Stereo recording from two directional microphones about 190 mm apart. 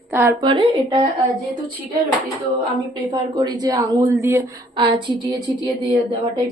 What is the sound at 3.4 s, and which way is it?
Speech, 20° right (ahead or behind).